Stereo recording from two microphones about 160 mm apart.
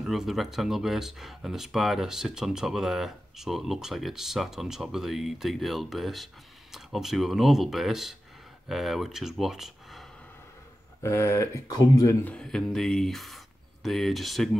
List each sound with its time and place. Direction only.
0.0 s speech: centre (ahead or behind)
11.0 s speech: 15° left (ahead or behind)
12.4 s speech: 5° left (ahead or behind)